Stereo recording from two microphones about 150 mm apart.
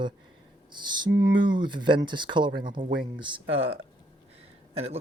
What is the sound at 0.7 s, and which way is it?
Speech, 30° right (ahead or behind).